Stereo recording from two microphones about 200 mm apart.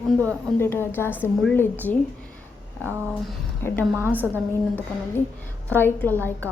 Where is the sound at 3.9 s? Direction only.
10° right (ahead or behind).